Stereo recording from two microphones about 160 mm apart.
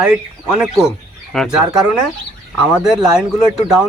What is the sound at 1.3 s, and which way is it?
Speech, centre (ahead or behind).